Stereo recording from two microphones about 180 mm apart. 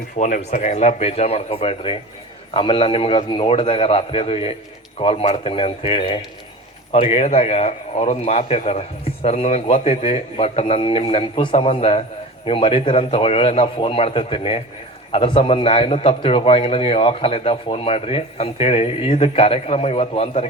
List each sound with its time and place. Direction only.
0.2 s a man's voice: 45° left (ahead or behind)